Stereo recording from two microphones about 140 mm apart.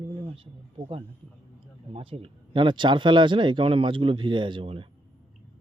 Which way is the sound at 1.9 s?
45° right (ahead or behind).